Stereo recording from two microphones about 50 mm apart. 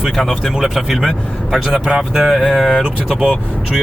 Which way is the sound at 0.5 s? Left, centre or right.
Centre.